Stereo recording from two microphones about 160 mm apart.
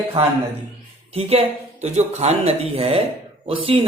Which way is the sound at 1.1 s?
40° right (ahead or behind).